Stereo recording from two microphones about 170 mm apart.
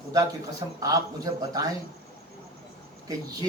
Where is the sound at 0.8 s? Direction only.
20° right (ahead or behind).